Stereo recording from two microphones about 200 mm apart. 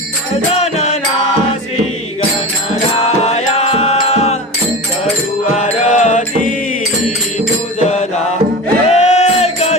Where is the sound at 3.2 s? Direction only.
35° left (ahead or behind).